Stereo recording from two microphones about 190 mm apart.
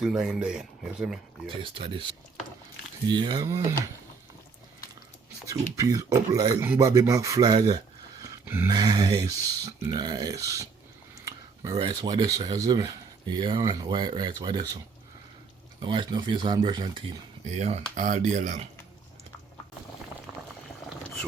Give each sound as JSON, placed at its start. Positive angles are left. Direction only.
{"t": 0.0, "sound": "speech", "side_deg": -5}
{"t": 1.5, "sound": "speech", "side_deg": -25}
{"t": 5.7, "sound": "speech", "side_deg": -15}
{"t": 8.2, "sound": "dog", "side_deg": -15}
{"t": 8.7, "sound": "speech", "side_deg": -20}
{"t": 11.1, "sound": "a sound", "side_deg": -15}
{"t": 11.7, "sound": "speech", "side_deg": -25}
{"t": 15.8, "sound": "speech", "side_deg": -25}
{"t": 17.4, "sound": "speech", "side_deg": -35}